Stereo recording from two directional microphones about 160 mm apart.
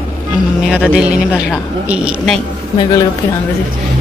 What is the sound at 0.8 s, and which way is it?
Speech, 5° right (ahead or behind).